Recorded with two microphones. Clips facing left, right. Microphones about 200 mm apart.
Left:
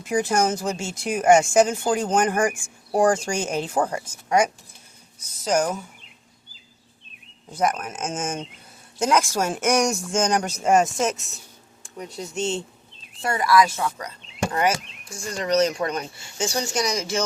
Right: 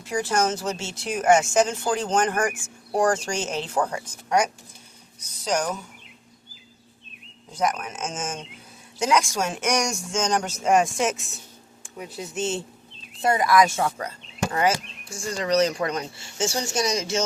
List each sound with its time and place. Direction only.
0.1 s speech: 15° left (ahead or behind)
7.5 s speech: 5° left (ahead or behind)
13.2 s speech: 20° right (ahead or behind)